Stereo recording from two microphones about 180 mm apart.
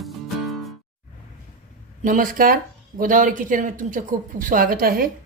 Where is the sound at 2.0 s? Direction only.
50° right (ahead or behind).